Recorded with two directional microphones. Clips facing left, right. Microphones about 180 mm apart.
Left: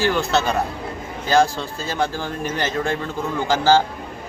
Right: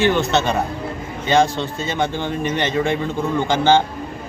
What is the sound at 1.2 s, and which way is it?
Speech, centre (ahead or behind).